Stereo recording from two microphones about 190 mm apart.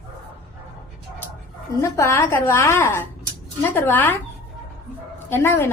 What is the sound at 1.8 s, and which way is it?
A woman's voice, 15° left (ahead or behind).